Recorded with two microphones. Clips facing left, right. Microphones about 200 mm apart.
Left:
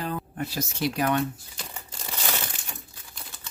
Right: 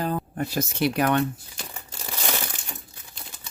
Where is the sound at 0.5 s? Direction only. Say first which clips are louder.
Right 4 dB; 60° right (ahead or behind).